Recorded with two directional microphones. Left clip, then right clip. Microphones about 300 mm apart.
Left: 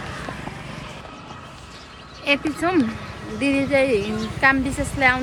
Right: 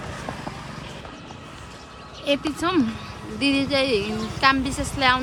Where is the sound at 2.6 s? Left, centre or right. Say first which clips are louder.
Left 2 dB; centre.